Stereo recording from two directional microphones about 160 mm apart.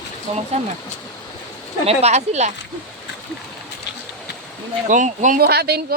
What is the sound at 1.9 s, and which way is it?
Speech, 40° right (ahead or behind).